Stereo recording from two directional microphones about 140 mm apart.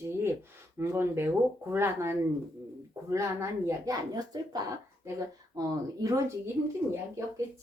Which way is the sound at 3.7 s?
25° right (ahead or behind).